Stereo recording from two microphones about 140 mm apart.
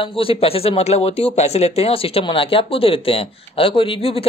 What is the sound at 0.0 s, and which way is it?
Speech, 40° left (ahead or behind).